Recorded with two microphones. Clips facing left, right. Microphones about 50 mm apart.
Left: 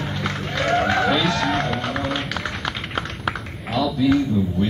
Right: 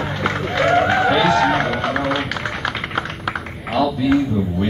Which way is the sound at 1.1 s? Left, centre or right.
Centre.